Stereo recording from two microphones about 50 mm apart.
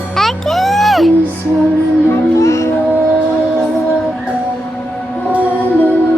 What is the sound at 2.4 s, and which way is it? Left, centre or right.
Music, left.